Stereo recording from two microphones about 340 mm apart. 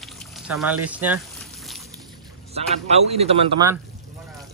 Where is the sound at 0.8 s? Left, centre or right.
Centre.